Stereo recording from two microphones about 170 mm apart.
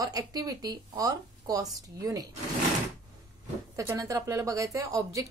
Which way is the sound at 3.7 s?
15° right (ahead or behind).